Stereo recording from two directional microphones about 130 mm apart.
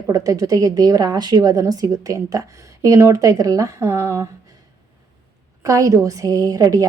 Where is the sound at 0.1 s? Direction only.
25° right (ahead or behind).